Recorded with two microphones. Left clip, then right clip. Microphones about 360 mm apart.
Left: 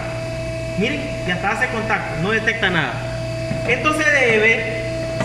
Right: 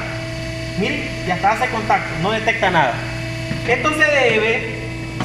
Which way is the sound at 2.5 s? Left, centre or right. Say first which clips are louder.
Right 3 dB; centre.